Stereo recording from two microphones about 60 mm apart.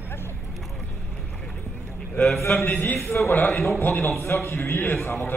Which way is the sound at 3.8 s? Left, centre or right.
Left.